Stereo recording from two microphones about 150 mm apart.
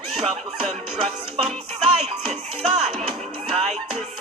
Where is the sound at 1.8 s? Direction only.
45° right (ahead or behind).